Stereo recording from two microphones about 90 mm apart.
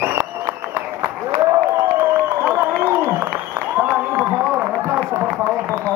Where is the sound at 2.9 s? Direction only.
25° right (ahead or behind).